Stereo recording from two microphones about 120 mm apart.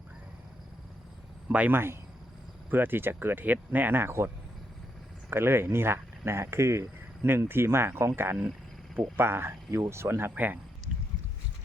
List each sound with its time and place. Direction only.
1.5 s speech: 15° right (ahead or behind)
5.3 s speech: 20° right (ahead or behind)